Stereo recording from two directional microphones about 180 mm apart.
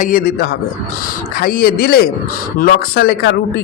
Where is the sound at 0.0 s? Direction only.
50° left (ahead or behind).